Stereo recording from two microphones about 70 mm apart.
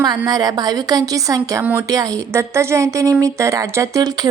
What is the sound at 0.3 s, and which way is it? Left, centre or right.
A woman's voice, right.